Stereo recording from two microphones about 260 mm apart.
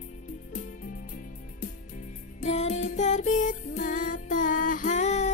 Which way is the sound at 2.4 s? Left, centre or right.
Left.